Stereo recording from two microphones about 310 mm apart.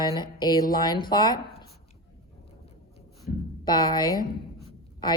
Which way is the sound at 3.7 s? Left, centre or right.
Centre.